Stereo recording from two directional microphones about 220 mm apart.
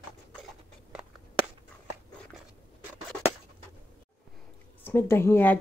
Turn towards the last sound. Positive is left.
turn(degrees=10)  # may be behind; listen again after turning